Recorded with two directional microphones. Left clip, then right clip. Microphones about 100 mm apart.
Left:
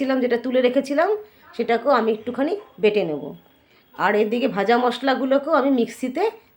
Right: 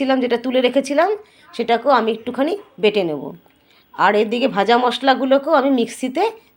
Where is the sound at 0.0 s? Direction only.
25° right (ahead or behind).